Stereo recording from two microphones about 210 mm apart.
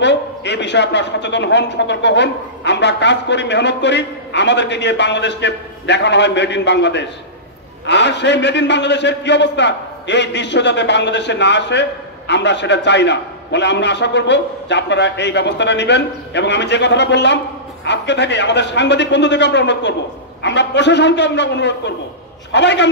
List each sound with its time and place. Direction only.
0.0 s a man's voice: 55° left (ahead or behind)